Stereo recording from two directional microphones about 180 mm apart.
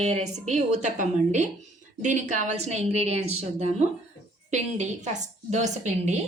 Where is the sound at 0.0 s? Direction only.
35° right (ahead or behind).